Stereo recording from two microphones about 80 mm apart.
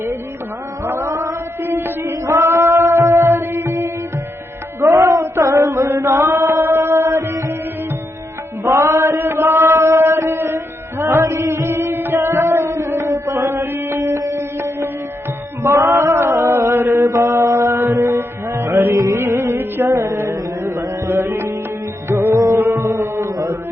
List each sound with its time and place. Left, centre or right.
0.9 s a sound: right
1.6 s music: right
4.8 s chant: right
8.6 s mantra: right
14.3 s music: right
18.9 s music: right
19.2 s music: right